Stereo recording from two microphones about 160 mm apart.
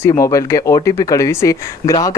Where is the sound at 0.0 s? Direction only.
20° left (ahead or behind).